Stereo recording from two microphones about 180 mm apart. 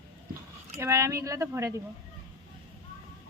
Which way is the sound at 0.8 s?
15° right (ahead or behind).